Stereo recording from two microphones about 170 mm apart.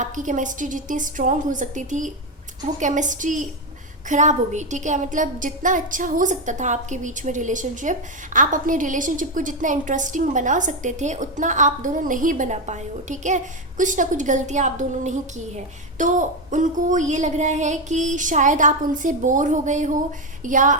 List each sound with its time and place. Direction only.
0.0 s a woman's voice: 50° right (ahead or behind)